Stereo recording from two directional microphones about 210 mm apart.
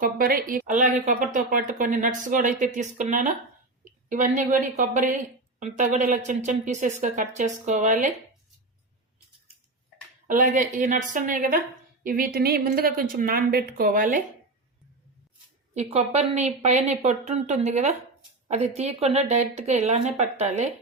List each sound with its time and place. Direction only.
0.0 s a woman's voice: 45° right (ahead or behind)
10.2 s a woman's voice: 35° right (ahead or behind)
15.7 s a woman's voice: 30° right (ahead or behind)